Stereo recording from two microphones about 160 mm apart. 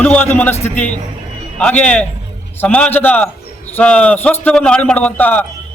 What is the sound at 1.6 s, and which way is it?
A man's voice, 10° left (ahead or behind).